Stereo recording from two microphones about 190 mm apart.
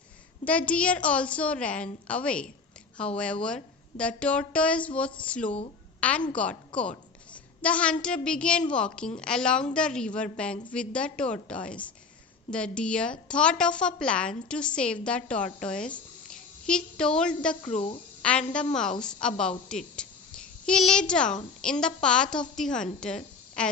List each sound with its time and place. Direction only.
0.4 s a woman's voice: 5° left (ahead or behind)
7.6 s a woman's voice: 5° left (ahead or behind)
17.7 s speech: 30° left (ahead or behind)
18.2 s a woman's voice: 5° left (ahead or behind)